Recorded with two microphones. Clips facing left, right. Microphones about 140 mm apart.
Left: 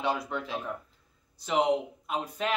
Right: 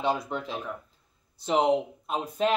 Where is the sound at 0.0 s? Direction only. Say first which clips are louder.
Right 2 dB; 20° right (ahead or behind).